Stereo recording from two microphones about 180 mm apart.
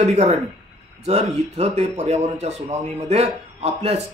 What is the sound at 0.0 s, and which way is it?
Speech, 40° right (ahead or behind).